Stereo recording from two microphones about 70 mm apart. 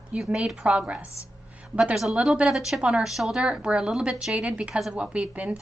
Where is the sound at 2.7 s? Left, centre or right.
Centre.